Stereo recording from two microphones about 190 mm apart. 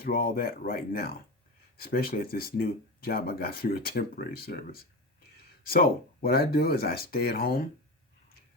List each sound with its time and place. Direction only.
0.0 s speech: 50° left (ahead or behind)